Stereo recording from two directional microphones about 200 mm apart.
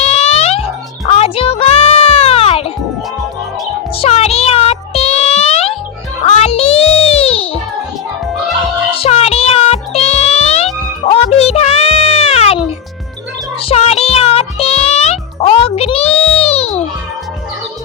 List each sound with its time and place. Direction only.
0.0 s music: 30° left (ahead or behind)
4.0 s music: 30° left (ahead or behind)
9.0 s music: 30° left (ahead or behind)